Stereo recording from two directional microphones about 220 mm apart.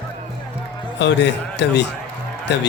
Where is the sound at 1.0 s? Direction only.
50° left (ahead or behind).